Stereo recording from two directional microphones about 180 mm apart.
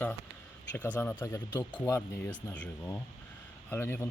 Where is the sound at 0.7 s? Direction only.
10° left (ahead or behind).